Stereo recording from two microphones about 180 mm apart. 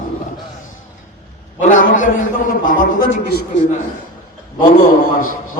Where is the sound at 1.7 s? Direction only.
45° left (ahead or behind).